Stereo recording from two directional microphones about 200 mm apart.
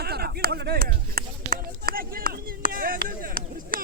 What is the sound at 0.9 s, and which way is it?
Run, 45° right (ahead or behind).